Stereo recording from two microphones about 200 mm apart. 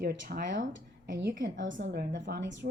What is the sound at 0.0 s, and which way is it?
A woman's voice, 55° right (ahead or behind).